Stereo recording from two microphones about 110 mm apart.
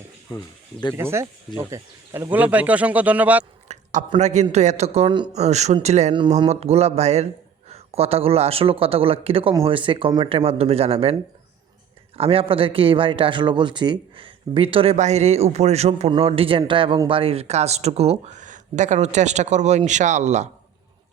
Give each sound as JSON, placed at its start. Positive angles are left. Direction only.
{"t": 0.3, "sound": "speech", "side_deg": 40}
{"t": 0.9, "sound": "speech", "side_deg": -25}
{"t": 2.3, "sound": "speech", "side_deg": -15}
{"t": 3.7, "sound": "a sound", "side_deg": -90}
{"t": 4.2, "sound": "a man's voice", "side_deg": -90}
{"t": 5.1, "sound": "speech", "side_deg": -45}
{"t": 5.4, "sound": "a man's voice", "side_deg": -90}
{"t": 6.5, "sound": "speech", "side_deg": -70}
{"t": 18.8, "sound": "a man's voice", "side_deg": -90}